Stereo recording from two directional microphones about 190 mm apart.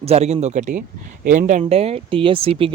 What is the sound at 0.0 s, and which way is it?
Speech, 35° right (ahead or behind).